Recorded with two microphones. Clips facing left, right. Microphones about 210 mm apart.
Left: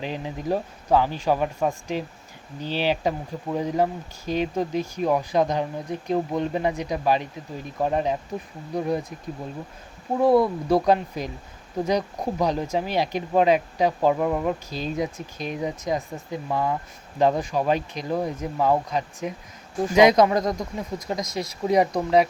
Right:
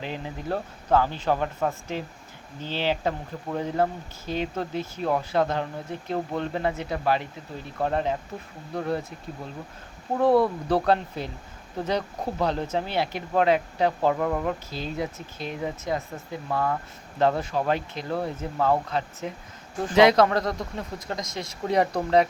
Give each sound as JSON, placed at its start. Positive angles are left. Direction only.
{"t": 0.0, "sound": "speech", "side_deg": 15}
{"t": 10.2, "sound": "speech", "side_deg": 10}
{"t": 21.2, "sound": "speech", "side_deg": -25}